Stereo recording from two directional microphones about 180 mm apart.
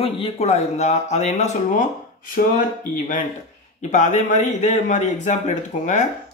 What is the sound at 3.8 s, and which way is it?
A man's voice, 40° left (ahead or behind).